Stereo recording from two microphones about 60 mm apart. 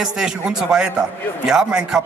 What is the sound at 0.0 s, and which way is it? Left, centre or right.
A man's voice, centre.